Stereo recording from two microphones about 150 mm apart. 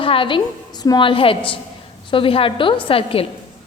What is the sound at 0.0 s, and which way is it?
A woman's voice, 35° left (ahead or behind).